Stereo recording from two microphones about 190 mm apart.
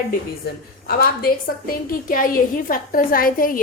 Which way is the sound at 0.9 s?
50° left (ahead or behind).